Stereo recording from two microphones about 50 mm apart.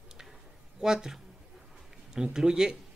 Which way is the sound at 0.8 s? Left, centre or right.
Centre.